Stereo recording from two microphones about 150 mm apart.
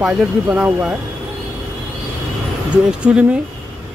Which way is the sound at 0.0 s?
10° right (ahead or behind).